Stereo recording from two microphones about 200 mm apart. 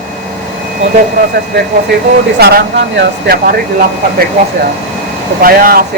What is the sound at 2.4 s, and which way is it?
Speech, 55° right (ahead or behind).